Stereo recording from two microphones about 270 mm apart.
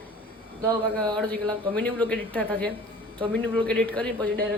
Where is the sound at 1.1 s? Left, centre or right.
Centre.